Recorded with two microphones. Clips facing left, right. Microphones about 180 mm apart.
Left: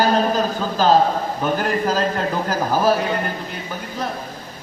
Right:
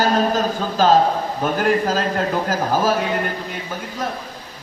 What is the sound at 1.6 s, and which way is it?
Speech, 45° right (ahead or behind).